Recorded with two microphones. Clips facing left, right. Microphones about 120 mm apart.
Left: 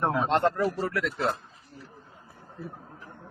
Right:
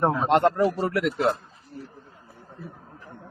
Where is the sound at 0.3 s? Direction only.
15° right (ahead or behind).